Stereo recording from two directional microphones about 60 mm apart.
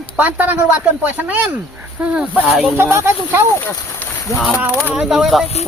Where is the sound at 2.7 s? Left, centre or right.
Right.